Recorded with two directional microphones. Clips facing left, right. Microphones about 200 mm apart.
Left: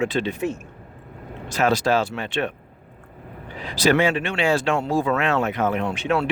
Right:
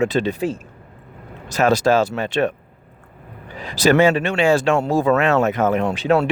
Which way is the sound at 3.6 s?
45° right (ahead or behind).